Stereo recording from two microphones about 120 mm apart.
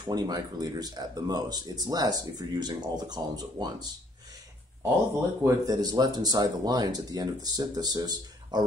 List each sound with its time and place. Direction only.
0.0 s speech: 35° right (ahead or behind)
5.4 s speech: 30° right (ahead or behind)